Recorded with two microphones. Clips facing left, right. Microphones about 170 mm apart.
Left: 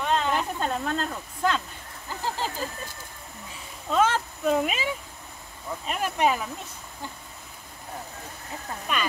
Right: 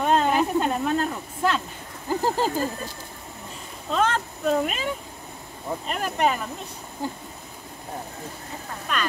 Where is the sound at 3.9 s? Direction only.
5° left (ahead or behind).